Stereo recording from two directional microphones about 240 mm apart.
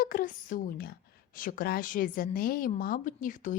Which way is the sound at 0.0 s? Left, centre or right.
Left.